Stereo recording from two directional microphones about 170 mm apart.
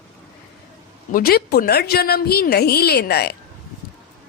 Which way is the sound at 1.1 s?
65° left (ahead or behind).